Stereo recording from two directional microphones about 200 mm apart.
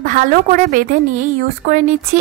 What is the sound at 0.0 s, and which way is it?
A woman's voice, 45° right (ahead or behind).